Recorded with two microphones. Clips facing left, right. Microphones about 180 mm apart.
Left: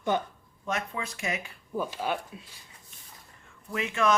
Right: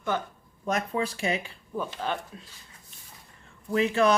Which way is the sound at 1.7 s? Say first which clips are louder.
Left 1 dB; 10° left (ahead or behind).